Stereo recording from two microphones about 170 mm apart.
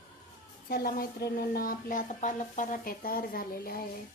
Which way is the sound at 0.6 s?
60° left (ahead or behind).